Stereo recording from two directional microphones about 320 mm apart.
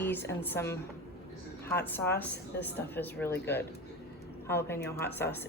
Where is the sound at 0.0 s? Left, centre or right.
Centre.